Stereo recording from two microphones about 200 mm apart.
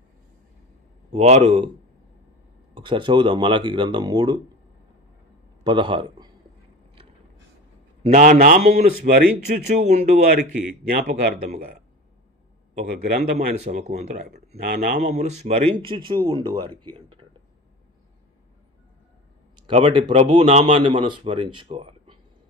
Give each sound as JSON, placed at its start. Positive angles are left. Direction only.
{"t": 1.1, "sound": "a man's voice", "side_deg": -30}
{"t": 2.7, "sound": "a man's voice", "side_deg": -25}
{"t": 5.6, "sound": "a man's voice", "side_deg": -20}
{"t": 8.0, "sound": "a man's voice", "side_deg": -35}
{"t": 9.7, "sound": "speech", "side_deg": -35}
{"t": 12.8, "sound": "a man's voice", "side_deg": -50}
{"t": 13.6, "sound": "speech", "side_deg": -35}
{"t": 14.6, "sound": "a man's voice", "side_deg": -50}
{"t": 15.1, "sound": "a man's voice", "side_deg": -35}
{"t": 19.6, "sound": "a man's voice", "side_deg": -30}